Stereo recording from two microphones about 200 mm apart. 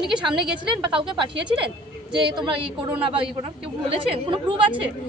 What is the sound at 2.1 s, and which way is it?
Speech, 25° right (ahead or behind).